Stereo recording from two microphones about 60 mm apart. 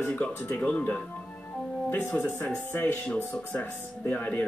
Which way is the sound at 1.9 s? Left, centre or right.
Left.